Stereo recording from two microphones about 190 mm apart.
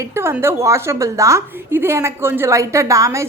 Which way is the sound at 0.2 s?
15° right (ahead or behind).